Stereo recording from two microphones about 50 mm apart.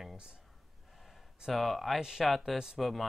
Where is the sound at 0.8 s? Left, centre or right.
Centre.